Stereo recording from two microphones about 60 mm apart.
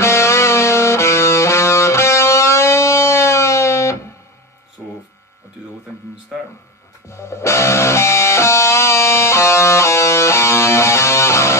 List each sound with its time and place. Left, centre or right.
0.0 s music: left
7.1 s music: left